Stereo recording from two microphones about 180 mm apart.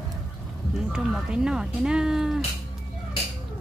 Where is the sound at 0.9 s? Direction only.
Centre (ahead or behind).